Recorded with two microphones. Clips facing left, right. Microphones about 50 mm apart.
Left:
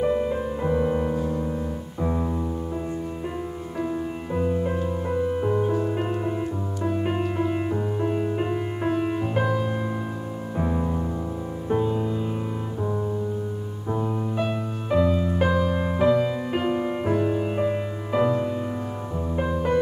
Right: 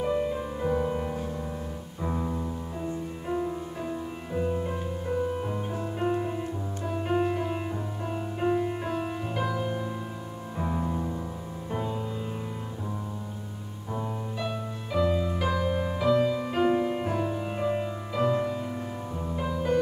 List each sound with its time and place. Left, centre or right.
0.0 s music: centre
3.8 s music: centre; by 9.6 s left
10.6 s music: centre
13.9 s music: left
15.0 s music: centre
15.3 s music: left
19.3 s music: left